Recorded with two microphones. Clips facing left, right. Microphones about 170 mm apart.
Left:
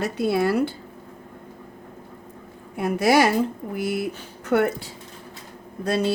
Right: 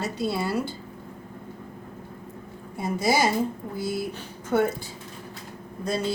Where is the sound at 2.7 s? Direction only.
70° left (ahead or behind).